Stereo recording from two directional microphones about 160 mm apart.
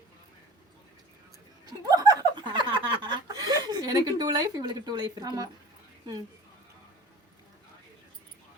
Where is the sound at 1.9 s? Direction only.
25° right (ahead or behind).